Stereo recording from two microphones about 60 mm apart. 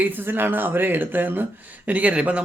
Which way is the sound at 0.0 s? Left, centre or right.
Right.